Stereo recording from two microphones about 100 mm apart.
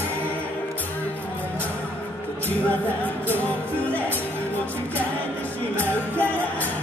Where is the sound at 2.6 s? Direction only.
15° left (ahead or behind).